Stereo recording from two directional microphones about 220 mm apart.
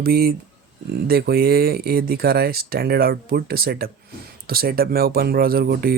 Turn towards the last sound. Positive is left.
turn(degrees=-45)  # may be behind; listen again after turning